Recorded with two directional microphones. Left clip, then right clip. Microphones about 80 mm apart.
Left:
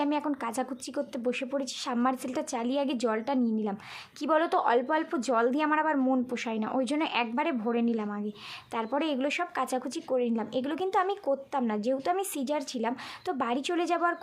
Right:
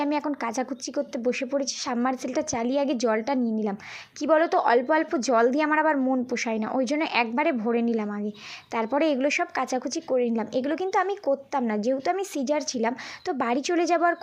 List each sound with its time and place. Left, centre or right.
0.0 s a woman's voice: right
6.3 s a woman's voice: right
7.6 s a woman's voice: right